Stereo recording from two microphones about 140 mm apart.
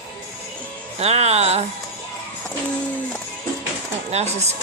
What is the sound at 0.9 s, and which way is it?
Speech, 45° right (ahead or behind).